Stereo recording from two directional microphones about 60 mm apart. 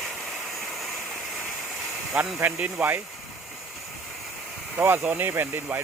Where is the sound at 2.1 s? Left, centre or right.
Centre.